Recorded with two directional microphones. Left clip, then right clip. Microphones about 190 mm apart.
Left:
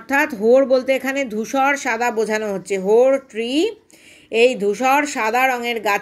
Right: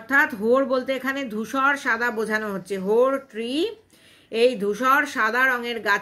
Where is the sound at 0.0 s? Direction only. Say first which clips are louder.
Left 3 dB; 15° left (ahead or behind).